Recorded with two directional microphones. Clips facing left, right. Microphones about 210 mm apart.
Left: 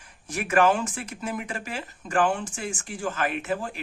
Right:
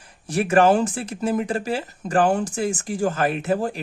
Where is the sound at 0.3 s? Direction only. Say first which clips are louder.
Right 5 dB; 35° right (ahead or behind).